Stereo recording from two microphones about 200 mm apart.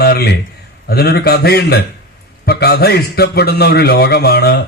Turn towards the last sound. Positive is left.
turn(degrees=50)  # may be behind; listen again after turning